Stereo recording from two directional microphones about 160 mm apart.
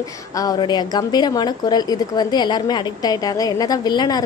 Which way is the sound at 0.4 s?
25° left (ahead or behind).